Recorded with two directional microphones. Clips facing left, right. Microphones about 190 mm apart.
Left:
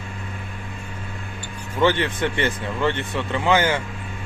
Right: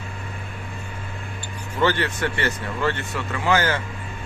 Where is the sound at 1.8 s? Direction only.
20° left (ahead or behind).